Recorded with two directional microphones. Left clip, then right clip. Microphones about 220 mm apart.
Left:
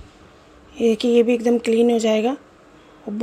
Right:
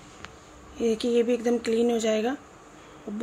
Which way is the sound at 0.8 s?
30° left (ahead or behind).